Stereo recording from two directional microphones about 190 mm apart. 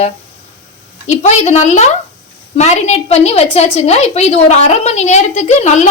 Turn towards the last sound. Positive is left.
turn(degrees=35)  # may be behind; listen again after turning